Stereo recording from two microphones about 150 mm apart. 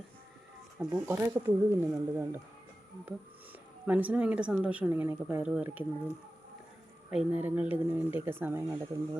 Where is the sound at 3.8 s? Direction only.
10° right (ahead or behind).